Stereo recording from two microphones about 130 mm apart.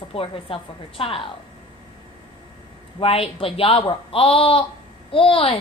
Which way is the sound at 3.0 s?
45° left (ahead or behind).